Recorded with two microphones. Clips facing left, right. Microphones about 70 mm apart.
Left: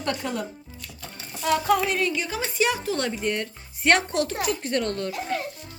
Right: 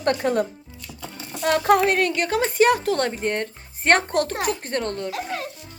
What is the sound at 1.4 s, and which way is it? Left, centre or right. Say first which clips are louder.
A woman's voice: right 4 dB; right.